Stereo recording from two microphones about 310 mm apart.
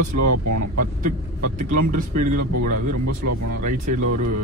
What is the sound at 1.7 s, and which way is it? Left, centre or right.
Speech, right.